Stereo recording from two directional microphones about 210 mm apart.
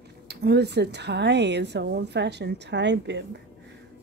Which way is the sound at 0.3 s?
50° right (ahead or behind).